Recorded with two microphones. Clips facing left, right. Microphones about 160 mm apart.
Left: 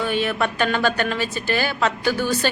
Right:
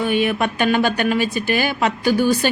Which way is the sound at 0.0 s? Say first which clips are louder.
Right 3 dB; 15° right (ahead or behind).